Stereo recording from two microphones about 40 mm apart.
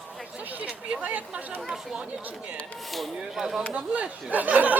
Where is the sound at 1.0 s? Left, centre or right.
Right.